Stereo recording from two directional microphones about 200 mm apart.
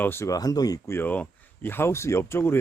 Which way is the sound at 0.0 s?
10° left (ahead or behind).